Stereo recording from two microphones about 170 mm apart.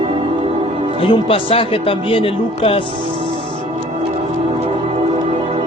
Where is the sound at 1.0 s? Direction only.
30° left (ahead or behind).